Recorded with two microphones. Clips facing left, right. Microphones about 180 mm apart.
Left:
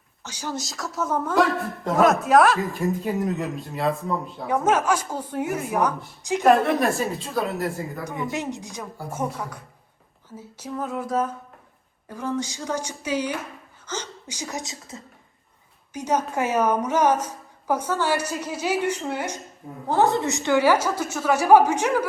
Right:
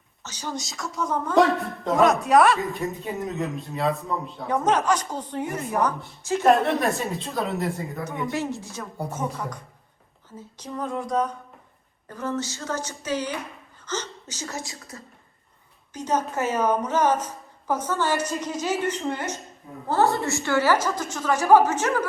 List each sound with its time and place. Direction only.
0.2 s a woman's voice: 10° left (ahead or behind)
8.3 s a woman's voice: 20° left (ahead or behind)
15.9 s a woman's voice: 10° left (ahead or behind)